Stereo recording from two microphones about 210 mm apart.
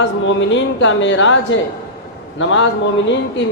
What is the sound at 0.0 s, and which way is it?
A man's voice, 60° left (ahead or behind).